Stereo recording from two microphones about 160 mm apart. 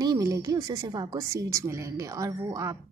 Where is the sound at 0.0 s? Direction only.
20° right (ahead or behind).